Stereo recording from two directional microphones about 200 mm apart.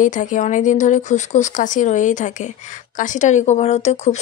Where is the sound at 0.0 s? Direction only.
40° left (ahead or behind).